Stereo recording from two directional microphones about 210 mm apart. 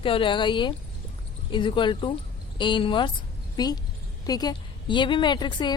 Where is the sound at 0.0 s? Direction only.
25° left (ahead or behind).